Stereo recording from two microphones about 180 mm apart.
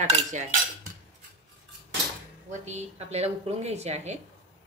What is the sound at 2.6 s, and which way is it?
A woman's voice, 35° right (ahead or behind).